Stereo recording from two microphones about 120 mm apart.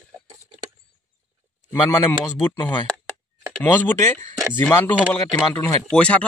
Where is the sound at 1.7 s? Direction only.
20° left (ahead or behind).